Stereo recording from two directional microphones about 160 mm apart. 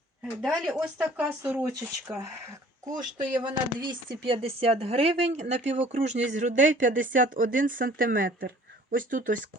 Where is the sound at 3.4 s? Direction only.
30° right (ahead or behind).